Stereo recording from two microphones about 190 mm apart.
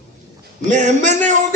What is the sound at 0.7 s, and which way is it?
Speech, 40° right (ahead or behind).